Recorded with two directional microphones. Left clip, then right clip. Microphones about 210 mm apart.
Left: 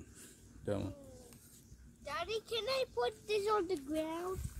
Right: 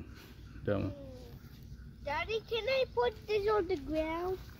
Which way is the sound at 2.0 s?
50° left (ahead or behind).